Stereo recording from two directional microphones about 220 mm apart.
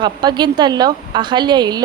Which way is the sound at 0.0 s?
20° right (ahead or behind).